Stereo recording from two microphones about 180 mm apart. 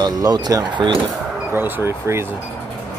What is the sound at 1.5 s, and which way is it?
Speech, 10° right (ahead or behind).